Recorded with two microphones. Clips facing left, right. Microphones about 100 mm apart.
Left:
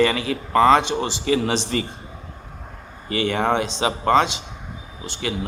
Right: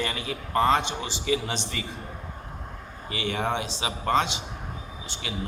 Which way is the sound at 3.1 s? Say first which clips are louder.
Left 7 dB; 65° left (ahead or behind).